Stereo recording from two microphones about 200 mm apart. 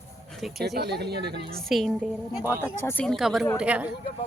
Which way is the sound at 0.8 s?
55° right (ahead or behind).